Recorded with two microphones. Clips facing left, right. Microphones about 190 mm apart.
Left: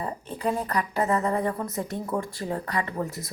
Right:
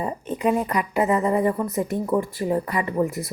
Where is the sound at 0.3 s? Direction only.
15° right (ahead or behind).